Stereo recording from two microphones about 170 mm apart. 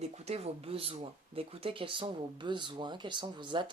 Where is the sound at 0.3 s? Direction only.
40° right (ahead or behind).